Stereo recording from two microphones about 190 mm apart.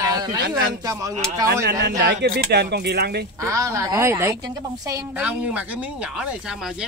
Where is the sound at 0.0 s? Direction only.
20° right (ahead or behind).